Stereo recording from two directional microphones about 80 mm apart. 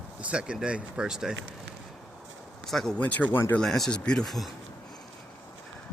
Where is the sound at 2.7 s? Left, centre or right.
Centre.